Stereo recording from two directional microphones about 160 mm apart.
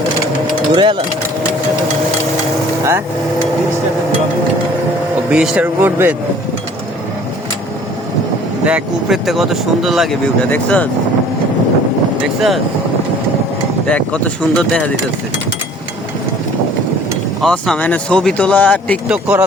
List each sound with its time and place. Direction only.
0.7 s speech: 30° right (ahead or behind)
2.8 s speech: 20° right (ahead or behind)
5.3 s speech: 5° right (ahead or behind)
8.6 s speech: 5° right (ahead or behind)
13.8 s speech: 5° left (ahead or behind)
17.4 s speech: 5° left (ahead or behind)
19.0 s speech: 10° right (ahead or behind)